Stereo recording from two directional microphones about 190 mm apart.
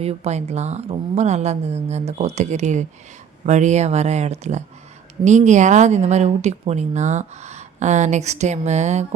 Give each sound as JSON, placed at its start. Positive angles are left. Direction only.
{"t": 0.0, "sound": "speech", "side_deg": -35}